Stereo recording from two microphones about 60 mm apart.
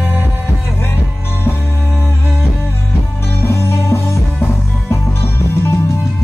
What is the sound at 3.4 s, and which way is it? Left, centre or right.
Music, left.